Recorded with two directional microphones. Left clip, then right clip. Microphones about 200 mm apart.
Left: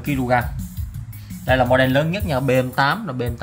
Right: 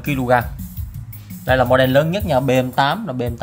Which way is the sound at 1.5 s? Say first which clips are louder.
Right 2 dB; 20° right (ahead or behind).